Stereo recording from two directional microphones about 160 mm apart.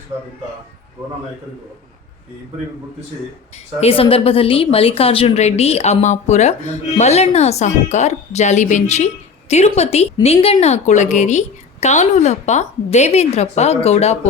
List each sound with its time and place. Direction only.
3.8 s a woman's voice: 35° left (ahead or behind)